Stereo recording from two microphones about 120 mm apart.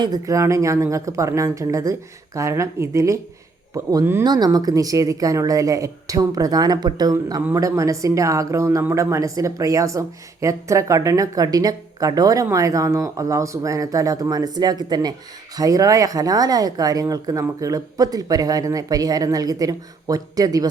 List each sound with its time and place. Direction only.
0.0 s speech: 30° right (ahead or behind)